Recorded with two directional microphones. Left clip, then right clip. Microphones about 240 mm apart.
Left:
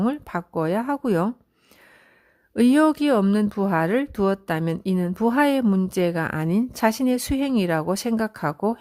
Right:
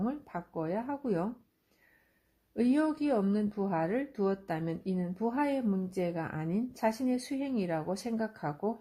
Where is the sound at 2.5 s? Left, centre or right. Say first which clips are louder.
Left 11 dB; left.